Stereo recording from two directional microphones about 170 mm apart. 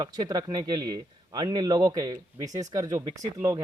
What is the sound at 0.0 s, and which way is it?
Speech, 25° right (ahead or behind).